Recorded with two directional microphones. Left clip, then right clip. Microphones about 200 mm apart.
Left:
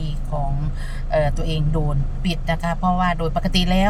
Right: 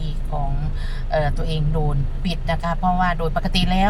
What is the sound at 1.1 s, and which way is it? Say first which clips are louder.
Speech: left 2 dB; 15° left (ahead or behind).